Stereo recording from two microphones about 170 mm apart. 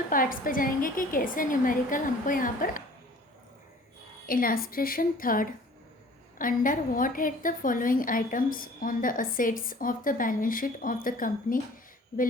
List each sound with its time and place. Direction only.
0.1 s a woman's voice: 55° left (ahead or behind)
4.3 s a woman's voice: 55° left (ahead or behind)